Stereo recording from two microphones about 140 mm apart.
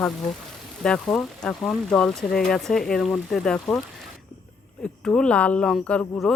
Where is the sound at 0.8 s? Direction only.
5° left (ahead or behind).